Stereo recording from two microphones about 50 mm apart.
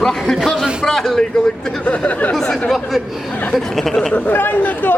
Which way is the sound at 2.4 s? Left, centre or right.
Left.